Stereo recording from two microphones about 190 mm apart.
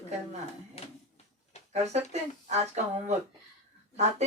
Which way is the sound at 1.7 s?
35° right (ahead or behind).